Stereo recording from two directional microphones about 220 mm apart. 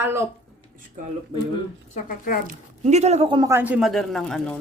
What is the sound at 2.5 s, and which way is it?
Speech, 30° right (ahead or behind).